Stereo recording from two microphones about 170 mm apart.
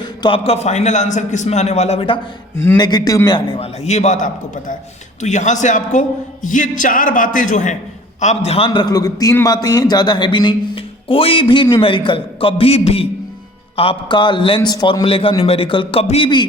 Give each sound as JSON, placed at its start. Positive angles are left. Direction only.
{"t": 0.0, "sound": "a man's voice", "side_deg": 30}